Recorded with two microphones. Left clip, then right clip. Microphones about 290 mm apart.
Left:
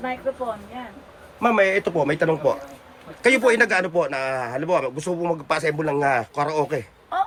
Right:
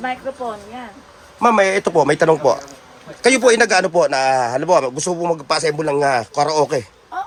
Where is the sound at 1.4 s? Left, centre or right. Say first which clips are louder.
Right 5 dB; centre.